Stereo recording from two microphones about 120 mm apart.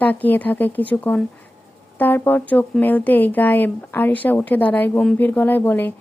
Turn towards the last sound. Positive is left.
turn(degrees=15)  # may be behind; listen again after turning